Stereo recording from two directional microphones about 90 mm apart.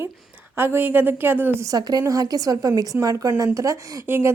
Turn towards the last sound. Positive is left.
turn(degrees=-25)  # may be behind; listen again after turning